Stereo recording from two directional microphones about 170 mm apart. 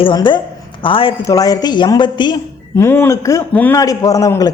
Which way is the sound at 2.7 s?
15° left (ahead or behind).